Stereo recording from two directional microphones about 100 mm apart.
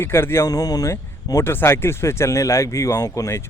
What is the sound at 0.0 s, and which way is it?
Speech, 25° left (ahead or behind).